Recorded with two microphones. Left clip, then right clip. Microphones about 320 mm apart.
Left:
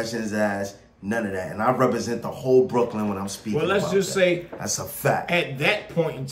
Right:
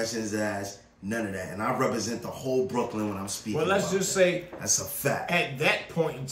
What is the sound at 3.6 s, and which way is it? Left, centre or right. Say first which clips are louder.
Speech: left 4 dB; centre.